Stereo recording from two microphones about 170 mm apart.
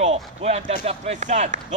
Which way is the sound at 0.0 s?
40° right (ahead or behind).